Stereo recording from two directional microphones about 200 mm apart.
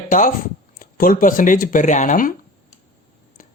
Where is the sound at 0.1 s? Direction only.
40° left (ahead or behind).